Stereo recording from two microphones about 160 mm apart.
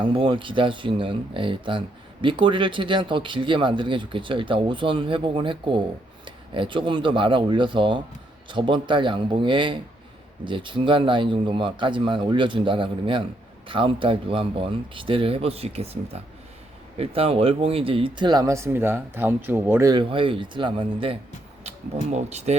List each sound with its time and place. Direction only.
0.0 s speech: 30° right (ahead or behind)
17.0 s speech: 40° right (ahead or behind); by 19.9 s 15° right (ahead or behind)
19.9 s speech: 30° right (ahead or behind)